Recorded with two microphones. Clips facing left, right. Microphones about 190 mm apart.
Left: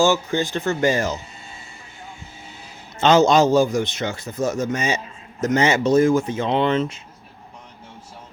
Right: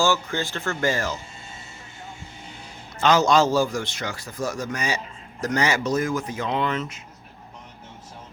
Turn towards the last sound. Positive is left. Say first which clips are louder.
# left 6 dB
turn(degrees=30)  # may be behind; listen again after turning